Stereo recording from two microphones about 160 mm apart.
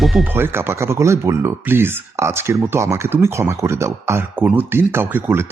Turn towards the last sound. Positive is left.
turn(degrees=-15)  # may be behind; listen again after turning